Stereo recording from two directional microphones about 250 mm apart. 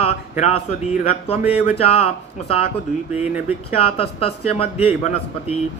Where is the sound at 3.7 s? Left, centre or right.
Left.